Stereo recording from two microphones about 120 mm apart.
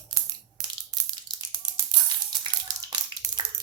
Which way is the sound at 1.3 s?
40° right (ahead or behind).